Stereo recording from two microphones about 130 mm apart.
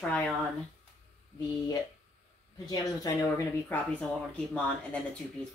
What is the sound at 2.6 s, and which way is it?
Speech, 30° left (ahead or behind).